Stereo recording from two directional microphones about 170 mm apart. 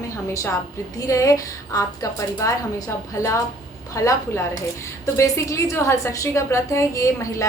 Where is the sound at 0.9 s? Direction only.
20° left (ahead or behind).